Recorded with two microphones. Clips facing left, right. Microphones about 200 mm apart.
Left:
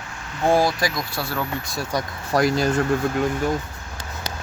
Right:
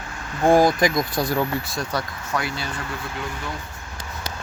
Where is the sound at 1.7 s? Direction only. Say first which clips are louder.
Left 1 dB; 10° left (ahead or behind).